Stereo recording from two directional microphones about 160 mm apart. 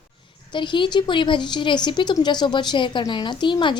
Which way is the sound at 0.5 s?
30° left (ahead or behind).